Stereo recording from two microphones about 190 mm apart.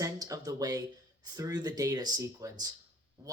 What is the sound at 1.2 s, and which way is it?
Speech, 20° right (ahead or behind).